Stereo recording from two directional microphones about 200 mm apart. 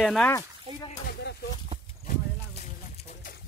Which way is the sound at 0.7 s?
30° right (ahead or behind).